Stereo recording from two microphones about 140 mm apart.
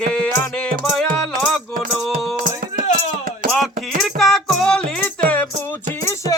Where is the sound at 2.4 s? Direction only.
80° right.